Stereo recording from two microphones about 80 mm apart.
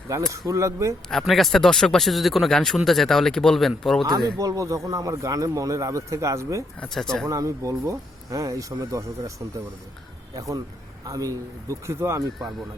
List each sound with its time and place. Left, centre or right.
0.3 s a man's voice: right
1.1 s speech: centre
4.4 s speech: right
6.8 s speech: centre
7.3 s speech: right
10.3 s a man's voice: right
12.4 s speech: centre